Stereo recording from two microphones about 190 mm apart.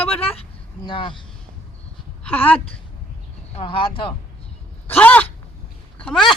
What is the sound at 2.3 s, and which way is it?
Speech, 10° left (ahead or behind).